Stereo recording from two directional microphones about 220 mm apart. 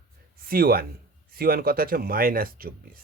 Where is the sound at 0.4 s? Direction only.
45° right (ahead or behind).